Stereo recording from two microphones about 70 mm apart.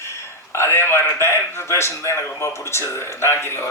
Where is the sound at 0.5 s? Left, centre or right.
Left.